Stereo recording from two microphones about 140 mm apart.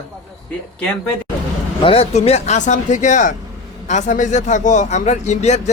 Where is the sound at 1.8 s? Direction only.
45° left (ahead or behind).